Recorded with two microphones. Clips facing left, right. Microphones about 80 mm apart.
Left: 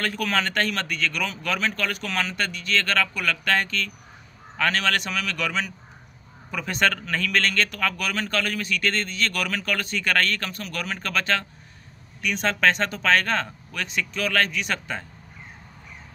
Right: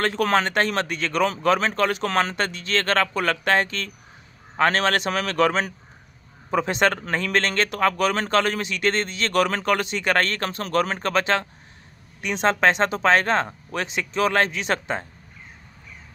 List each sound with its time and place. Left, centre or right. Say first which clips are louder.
0.0 s speech: right 5 dB; right